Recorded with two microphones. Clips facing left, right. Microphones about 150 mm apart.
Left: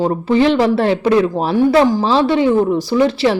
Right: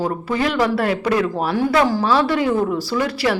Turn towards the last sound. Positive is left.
turn(degrees=25)  # may be behind; listen again after turning